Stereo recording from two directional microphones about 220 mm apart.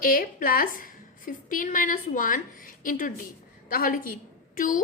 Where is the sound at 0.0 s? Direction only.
40° left (ahead or behind).